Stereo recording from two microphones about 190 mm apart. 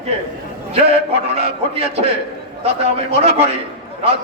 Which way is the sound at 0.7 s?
30° right (ahead or behind).